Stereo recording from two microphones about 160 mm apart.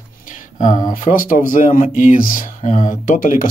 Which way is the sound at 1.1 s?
60° left (ahead or behind).